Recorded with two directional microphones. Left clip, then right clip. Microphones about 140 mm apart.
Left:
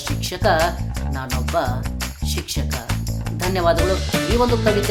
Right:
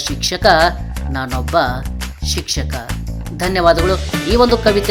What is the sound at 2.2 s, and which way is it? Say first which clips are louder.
Music: right 8 dB; 25° right (ahead or behind).